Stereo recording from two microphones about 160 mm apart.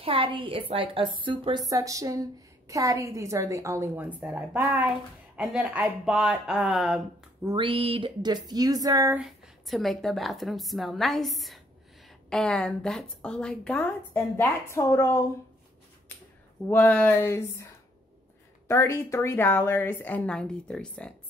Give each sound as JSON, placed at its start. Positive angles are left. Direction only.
{"t": 0.0, "sound": "a woman's voice", "side_deg": -35}
{"t": 7.5, "sound": "speech", "side_deg": -35}
{"t": 9.1, "sound": "a woman's voice", "side_deg": 0}
{"t": 16.1, "sound": "a sound", "side_deg": 10}
{"t": 16.6, "sound": "a woman's voice", "side_deg": 10}
{"t": 18.7, "sound": "a woman's voice", "side_deg": 15}